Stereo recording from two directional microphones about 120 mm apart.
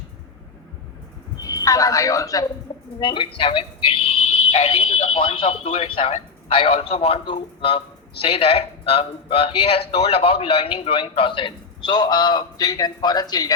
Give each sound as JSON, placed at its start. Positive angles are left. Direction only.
{"t": 1.4, "sound": "speech", "side_deg": 30}
{"t": 3.0, "sound": "speech", "side_deg": 45}